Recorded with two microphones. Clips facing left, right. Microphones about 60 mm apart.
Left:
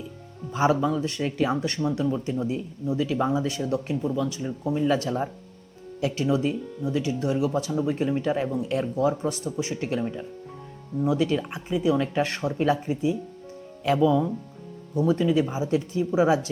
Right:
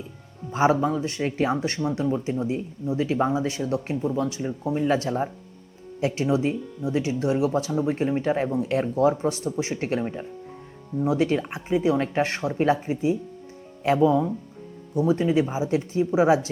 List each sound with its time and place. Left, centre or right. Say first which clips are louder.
0.5 s speech: right 1 dB; right